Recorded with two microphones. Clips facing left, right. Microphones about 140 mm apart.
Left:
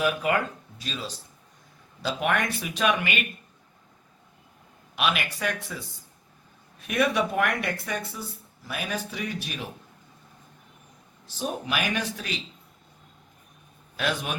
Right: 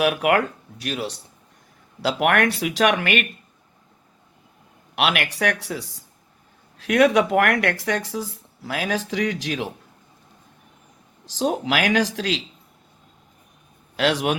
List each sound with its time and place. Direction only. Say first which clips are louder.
0.0 s speech: right 6 dB; 80° right
4.9 s speech: right 5 dB; 75° right (ahead or behind); by 9.6 s 90° right
11.3 s speech: right 8 dB; 90° right
13.9 s a man's voice: right 8 dB; 80° right